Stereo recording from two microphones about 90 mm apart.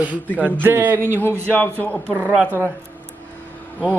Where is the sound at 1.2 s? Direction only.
25° left (ahead or behind).